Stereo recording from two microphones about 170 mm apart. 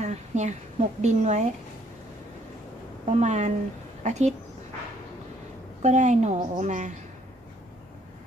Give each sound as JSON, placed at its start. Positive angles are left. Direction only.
{"t": 0.0, "sound": "speech", "side_deg": -40}
{"t": 3.1, "sound": "a woman's voice", "side_deg": -45}
{"t": 5.8, "sound": "speech", "side_deg": -45}